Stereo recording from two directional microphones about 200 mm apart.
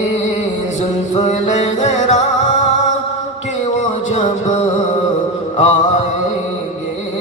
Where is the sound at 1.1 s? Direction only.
35° left (ahead or behind).